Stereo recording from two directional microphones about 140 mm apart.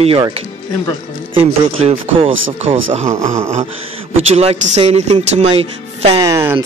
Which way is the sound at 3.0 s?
20° right (ahead or behind).